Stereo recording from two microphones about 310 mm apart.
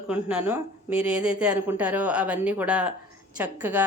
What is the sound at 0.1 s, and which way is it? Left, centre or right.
A woman's voice, centre.